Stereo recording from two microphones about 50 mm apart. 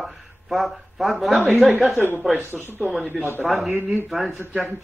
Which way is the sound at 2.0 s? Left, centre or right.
Right.